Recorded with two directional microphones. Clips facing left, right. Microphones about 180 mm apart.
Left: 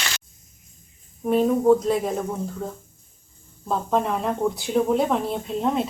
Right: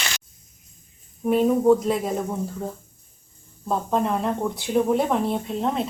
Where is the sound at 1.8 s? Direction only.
Centre (ahead or behind).